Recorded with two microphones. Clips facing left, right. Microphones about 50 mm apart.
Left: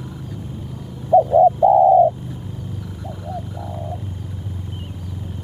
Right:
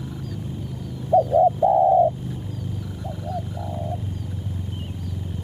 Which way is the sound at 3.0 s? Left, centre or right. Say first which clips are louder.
Even; centre.